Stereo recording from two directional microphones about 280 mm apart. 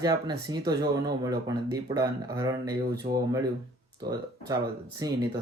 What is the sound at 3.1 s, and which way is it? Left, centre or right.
Speech, right.